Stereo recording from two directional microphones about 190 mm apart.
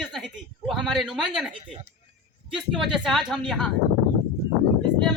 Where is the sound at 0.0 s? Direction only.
Centre (ahead or behind).